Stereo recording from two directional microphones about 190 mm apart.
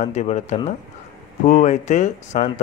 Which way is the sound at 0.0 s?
35° left (ahead or behind).